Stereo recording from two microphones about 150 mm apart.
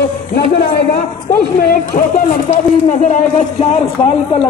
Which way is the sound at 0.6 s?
70° left (ahead or behind).